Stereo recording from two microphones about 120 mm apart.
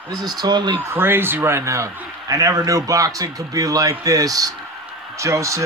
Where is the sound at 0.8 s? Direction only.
20° right (ahead or behind).